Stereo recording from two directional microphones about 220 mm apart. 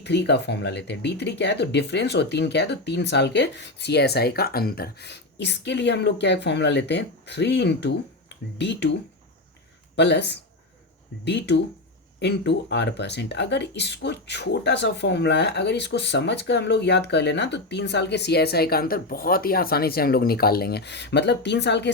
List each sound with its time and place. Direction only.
0.0 s speech: 50° left (ahead or behind)